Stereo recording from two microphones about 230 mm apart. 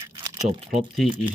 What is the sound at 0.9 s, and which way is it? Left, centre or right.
Speech, centre.